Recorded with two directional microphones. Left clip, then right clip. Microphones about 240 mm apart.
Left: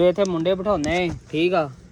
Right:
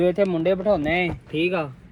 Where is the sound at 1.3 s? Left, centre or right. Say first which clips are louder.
Left 4 dB; left.